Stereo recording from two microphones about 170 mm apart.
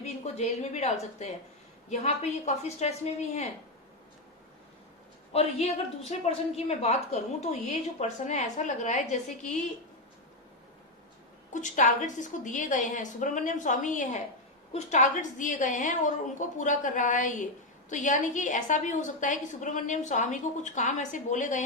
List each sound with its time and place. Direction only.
0.0 s a woman's voice: 40° left (ahead or behind)
5.3 s a woman's voice: 35° left (ahead or behind)
11.5 s a woman's voice: 45° left (ahead or behind)